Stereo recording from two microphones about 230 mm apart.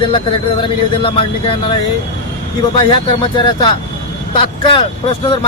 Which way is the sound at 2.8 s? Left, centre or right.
Left.